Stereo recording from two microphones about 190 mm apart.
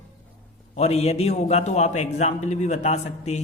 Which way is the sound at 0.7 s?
35° left (ahead or behind).